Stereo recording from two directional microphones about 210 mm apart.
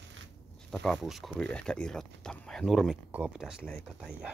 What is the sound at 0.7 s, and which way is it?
Speech, centre (ahead or behind).